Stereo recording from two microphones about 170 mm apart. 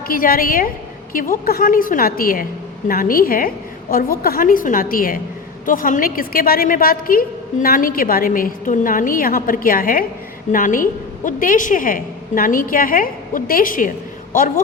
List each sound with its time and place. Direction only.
0.1 s a woman's voice: 60° left (ahead or behind)